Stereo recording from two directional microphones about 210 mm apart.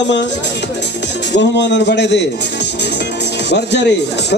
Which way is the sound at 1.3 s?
55° left (ahead or behind).